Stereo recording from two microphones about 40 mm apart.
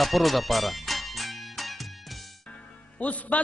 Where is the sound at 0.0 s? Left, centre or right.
Centre.